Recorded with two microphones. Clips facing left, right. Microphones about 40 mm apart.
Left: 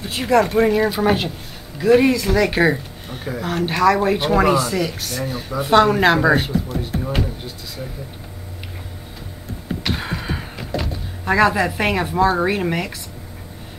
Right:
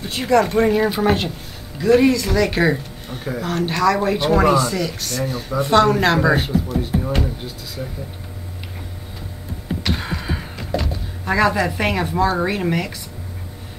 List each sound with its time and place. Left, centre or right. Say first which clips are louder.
0.0 s speech: even; centre
9.7 s music: even; centre